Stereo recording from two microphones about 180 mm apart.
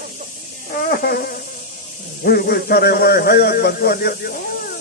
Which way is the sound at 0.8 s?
55° left (ahead or behind).